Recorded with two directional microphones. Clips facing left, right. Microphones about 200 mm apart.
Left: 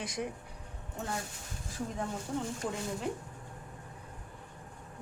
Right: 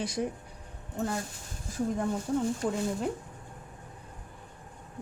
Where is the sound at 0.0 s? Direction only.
35° right (ahead or behind).